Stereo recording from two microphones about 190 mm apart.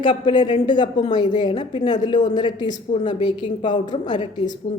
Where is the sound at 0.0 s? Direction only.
25° left (ahead or behind).